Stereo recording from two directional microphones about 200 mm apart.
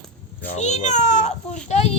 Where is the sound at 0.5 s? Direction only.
35° left (ahead or behind).